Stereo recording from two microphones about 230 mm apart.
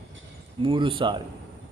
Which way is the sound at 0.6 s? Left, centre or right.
Right.